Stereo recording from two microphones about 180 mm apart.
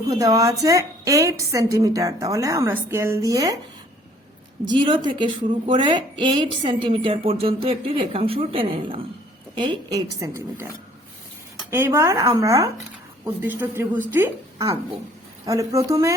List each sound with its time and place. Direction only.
0.1 s a woman's voice: 20° right (ahead or behind)
4.6 s a woman's voice: 25° right (ahead or behind)
11.7 s a woman's voice: 15° right (ahead or behind)